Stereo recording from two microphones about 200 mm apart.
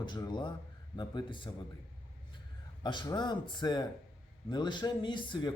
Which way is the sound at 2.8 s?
20° left (ahead or behind).